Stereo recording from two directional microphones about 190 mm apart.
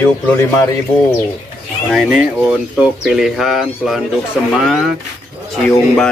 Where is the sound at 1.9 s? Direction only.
Centre (ahead or behind).